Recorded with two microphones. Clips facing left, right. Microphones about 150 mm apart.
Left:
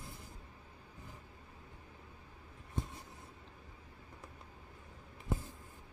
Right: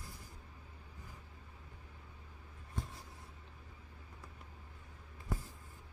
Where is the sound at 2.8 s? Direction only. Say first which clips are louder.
Left 3 dB; 20° left (ahead or behind).